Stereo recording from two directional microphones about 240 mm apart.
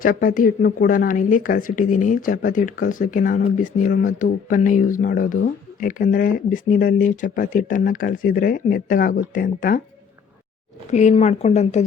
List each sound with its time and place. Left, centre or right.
0.0 s a woman's voice: left
10.9 s speech: left